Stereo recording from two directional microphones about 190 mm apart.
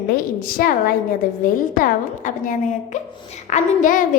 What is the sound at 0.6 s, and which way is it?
Speech, 50° left (ahead or behind).